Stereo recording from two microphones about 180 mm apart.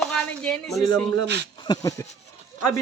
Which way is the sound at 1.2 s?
70° right (ahead or behind).